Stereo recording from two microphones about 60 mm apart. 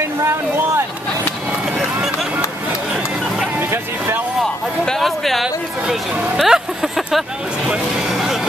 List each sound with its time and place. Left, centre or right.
0.2 s a sound: right
4.8 s speech: centre
8.1 s vehicle: centre